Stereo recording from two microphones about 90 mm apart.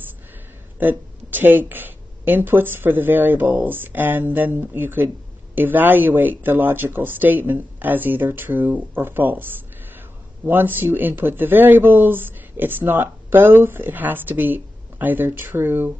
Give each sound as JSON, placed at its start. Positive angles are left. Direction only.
{"t": 0.7, "sound": "a woman's voice", "side_deg": -20}